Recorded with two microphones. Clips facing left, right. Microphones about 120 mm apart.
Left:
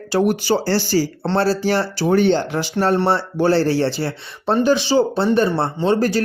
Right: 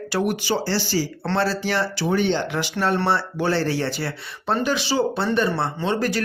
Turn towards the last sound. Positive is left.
turn(degrees=35)  # may be behind; listen again after turning